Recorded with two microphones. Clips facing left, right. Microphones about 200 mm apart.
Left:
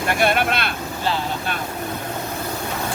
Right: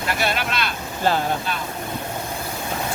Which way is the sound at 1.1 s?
45° right (ahead or behind).